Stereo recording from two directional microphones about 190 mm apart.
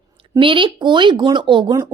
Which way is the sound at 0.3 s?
25° right (ahead or behind).